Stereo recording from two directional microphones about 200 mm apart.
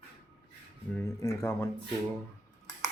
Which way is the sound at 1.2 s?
15° left (ahead or behind).